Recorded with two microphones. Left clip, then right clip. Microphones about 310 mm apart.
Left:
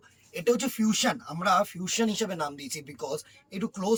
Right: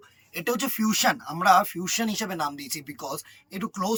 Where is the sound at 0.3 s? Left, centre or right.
Centre.